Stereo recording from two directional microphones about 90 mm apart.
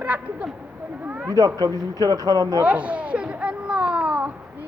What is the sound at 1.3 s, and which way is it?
Speech, 40° right (ahead or behind).